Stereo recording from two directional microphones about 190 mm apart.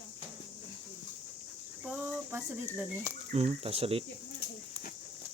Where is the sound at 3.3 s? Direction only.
30° right (ahead or behind).